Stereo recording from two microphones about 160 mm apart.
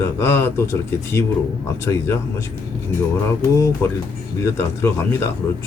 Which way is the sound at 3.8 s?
15° left (ahead or behind).